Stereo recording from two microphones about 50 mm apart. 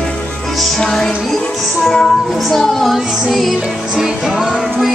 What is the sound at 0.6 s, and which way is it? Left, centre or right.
Music, centre.